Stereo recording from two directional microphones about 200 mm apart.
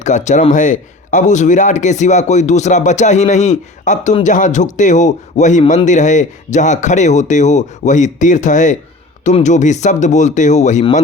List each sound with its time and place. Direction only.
0.0 s a man's voice: 35° left (ahead or behind)